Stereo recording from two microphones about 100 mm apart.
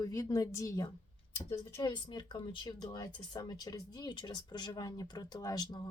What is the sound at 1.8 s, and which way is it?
Speech, 50° left (ahead or behind).